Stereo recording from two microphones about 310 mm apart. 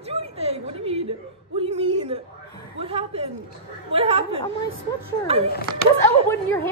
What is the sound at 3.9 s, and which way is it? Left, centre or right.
Chatter, centre.